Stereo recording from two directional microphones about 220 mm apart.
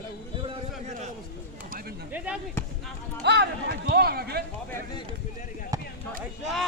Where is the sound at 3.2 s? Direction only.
50° right (ahead or behind).